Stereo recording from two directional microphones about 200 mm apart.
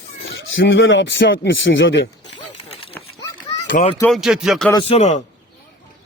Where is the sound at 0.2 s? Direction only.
70° left (ahead or behind).